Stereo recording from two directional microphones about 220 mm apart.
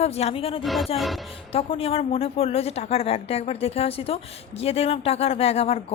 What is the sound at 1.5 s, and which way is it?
A woman's voice, 25° left (ahead or behind).